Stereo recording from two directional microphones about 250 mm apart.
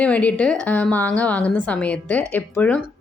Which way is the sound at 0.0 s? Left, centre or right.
Centre.